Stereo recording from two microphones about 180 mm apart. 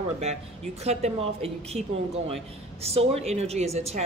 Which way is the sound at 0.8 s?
35° right (ahead or behind).